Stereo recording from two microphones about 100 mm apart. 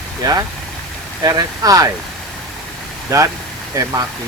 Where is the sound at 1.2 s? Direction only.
40° right (ahead or behind).